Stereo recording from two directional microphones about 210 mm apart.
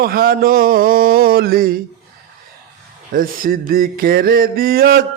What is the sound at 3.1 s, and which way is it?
Mantra, 40° right (ahead or behind).